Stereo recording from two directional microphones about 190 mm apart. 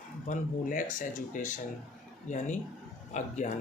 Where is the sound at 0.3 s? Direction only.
40° left (ahead or behind).